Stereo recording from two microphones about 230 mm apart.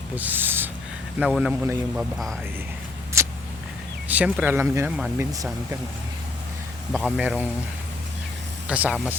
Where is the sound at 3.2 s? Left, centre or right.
Centre.